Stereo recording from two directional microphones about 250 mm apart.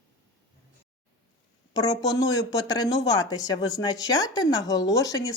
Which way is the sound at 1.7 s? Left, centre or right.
Centre.